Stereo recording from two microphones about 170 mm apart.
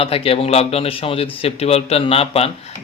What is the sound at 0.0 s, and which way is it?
A man's voice, 35° left (ahead or behind).